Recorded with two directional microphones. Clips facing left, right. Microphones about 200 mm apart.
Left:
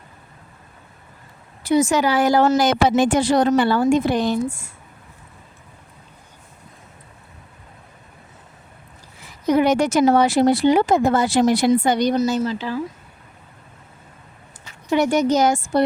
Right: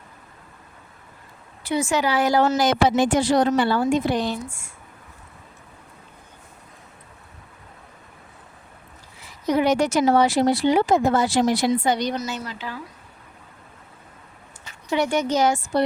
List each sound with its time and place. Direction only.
1.6 s a woman's voice: 45° left (ahead or behind)
9.5 s a woman's voice: 50° left (ahead or behind)
12.4 s speech: 30° left (ahead or behind)
14.9 s a woman's voice: 40° left (ahead or behind)